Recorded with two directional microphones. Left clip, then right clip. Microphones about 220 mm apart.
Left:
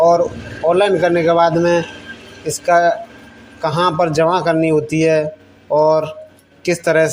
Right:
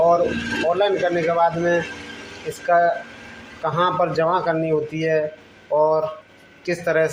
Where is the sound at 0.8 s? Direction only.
30° left (ahead or behind).